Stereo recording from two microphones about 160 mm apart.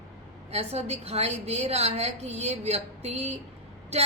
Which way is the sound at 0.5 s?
40° right (ahead or behind).